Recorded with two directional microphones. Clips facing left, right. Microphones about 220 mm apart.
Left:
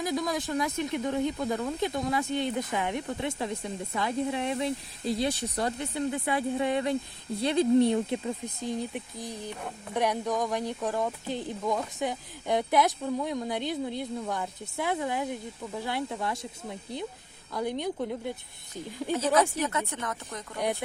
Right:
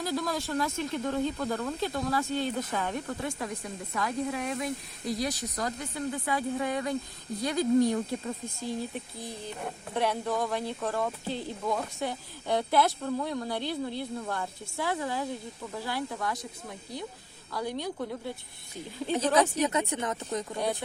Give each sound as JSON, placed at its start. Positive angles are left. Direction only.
{"t": 0.0, "sound": "speech", "side_deg": 15}
{"t": 19.3, "sound": "speech", "side_deg": -15}